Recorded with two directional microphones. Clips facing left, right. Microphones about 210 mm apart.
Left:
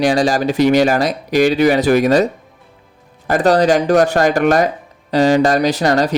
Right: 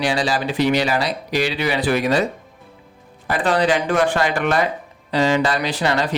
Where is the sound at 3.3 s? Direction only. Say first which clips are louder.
Left 6 dB; 40° left (ahead or behind).